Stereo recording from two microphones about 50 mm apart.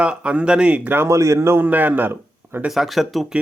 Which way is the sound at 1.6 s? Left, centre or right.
Right.